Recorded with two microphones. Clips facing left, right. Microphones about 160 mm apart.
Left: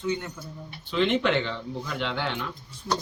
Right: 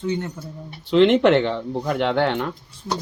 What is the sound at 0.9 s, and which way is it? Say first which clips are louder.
Speech: right 9 dB; 70° right (ahead or behind).